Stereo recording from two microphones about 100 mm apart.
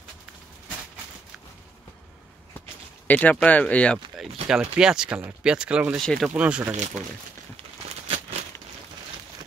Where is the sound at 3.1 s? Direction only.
15° left (ahead or behind).